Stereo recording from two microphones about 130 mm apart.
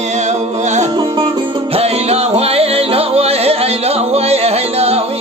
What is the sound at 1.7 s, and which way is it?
Music, 55° right (ahead or behind).